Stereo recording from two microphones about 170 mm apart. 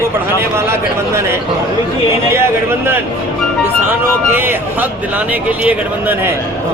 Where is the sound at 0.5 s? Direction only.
15° right (ahead or behind).